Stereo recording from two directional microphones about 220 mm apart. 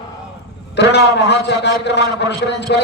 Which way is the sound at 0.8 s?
50° left (ahead or behind).